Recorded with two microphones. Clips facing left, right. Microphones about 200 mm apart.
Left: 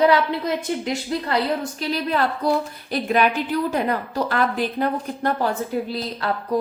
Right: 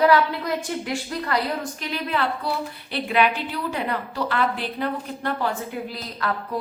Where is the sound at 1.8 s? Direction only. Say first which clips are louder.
Left 4 dB; 35° left (ahead or behind).